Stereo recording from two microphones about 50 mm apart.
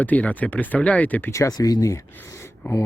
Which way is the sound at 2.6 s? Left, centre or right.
Left.